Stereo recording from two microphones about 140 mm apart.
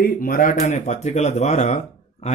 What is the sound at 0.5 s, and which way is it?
Speech, 55° left (ahead or behind).